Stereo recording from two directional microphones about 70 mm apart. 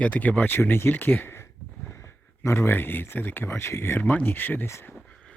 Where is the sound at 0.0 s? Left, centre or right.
Left.